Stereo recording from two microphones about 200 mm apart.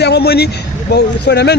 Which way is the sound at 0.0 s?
55° left (ahead or behind).